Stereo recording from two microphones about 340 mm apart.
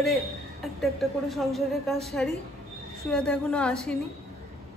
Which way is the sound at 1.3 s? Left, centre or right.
Centre.